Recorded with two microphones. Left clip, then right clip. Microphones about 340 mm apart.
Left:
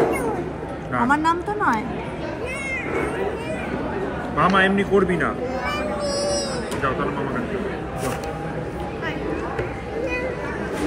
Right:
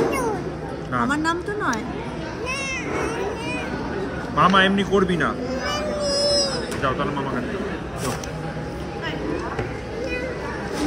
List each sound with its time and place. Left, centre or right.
1.0 s a woman's voice: centre
4.4 s a man's voice: centre
6.0 s wail: centre